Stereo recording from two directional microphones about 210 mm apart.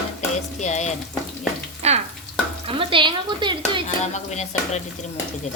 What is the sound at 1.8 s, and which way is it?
Stir, 30° right (ahead or behind).